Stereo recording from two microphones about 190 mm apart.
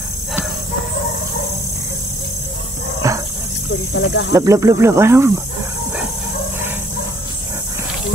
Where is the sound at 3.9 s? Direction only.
65° left (ahead or behind).